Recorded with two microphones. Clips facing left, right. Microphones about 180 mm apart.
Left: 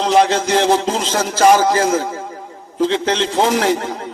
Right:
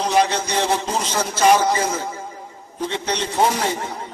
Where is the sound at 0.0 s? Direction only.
90° left.